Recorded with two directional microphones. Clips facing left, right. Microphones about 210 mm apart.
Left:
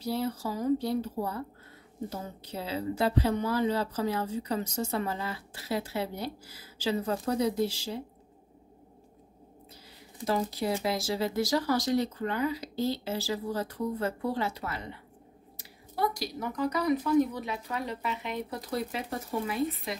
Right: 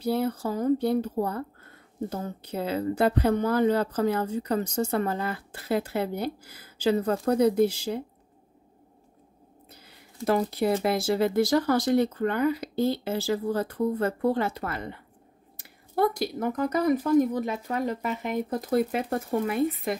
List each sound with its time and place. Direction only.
0.0 s speech: 55° right (ahead or behind)
10.2 s speech: 55° right (ahead or behind)